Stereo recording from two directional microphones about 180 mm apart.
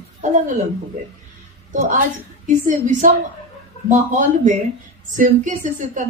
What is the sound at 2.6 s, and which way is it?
A woman's voice, 45° right (ahead or behind).